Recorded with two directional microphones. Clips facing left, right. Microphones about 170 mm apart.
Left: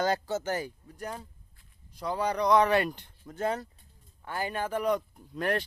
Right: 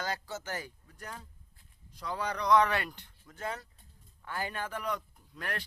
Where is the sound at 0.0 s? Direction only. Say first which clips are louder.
Left 9 dB; 20° left (ahead or behind).